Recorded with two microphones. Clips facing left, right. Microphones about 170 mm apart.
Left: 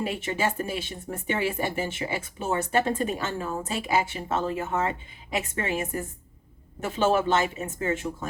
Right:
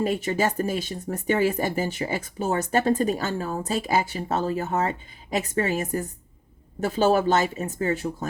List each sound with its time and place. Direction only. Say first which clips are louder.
0.0 s speech: right 4 dB; 40° right (ahead or behind)